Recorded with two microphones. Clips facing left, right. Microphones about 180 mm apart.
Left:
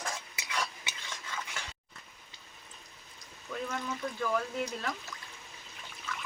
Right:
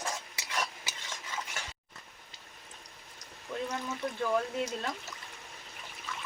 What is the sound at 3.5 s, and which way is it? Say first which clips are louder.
Speech: right 1 dB; 25° right (ahead or behind).